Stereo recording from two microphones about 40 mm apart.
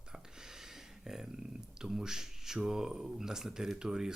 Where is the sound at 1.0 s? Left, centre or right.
Centre.